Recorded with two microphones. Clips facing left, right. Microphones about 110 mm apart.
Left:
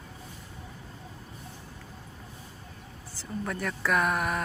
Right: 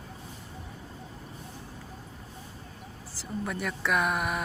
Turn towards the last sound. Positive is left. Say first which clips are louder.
# left 1 dB
turn(degrees=-5)  # may be behind; listen again after turning